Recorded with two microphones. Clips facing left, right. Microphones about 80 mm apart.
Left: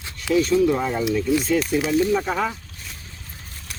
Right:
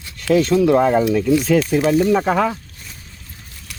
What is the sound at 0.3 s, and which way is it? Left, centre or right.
Speech, right.